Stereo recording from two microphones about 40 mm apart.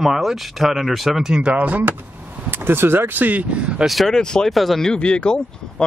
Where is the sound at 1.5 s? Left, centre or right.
Right.